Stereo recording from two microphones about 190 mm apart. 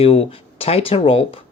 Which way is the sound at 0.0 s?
30° left (ahead or behind).